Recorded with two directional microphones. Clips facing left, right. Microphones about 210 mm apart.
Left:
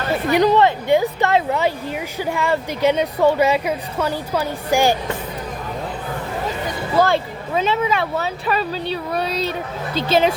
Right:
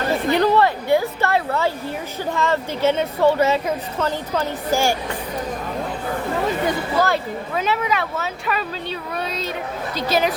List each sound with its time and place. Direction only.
0.3 s a woman's voice: 15° left (ahead or behind)
7.0 s speech: 25° left (ahead or behind)